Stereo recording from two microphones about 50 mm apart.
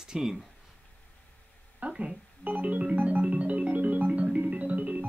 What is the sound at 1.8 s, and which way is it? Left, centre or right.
Speech, right.